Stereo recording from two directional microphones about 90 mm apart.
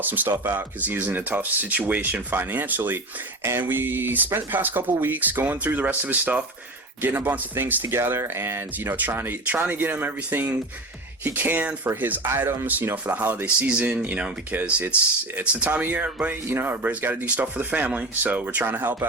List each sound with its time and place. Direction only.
0.0 s speech: 20° right (ahead or behind)